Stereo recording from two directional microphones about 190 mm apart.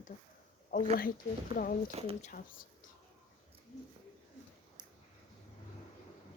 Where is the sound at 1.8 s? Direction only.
30° right (ahead or behind).